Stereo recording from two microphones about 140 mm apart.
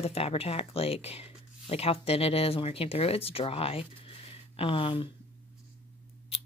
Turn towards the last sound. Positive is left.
turn(degrees=45)  # may be behind; listen again after turning